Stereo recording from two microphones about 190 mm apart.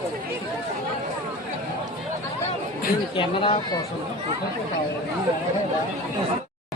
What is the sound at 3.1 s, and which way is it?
Speech, 25° left (ahead or behind).